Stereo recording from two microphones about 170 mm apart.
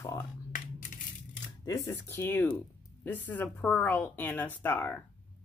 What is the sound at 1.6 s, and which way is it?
Speech, 20° left (ahead or behind).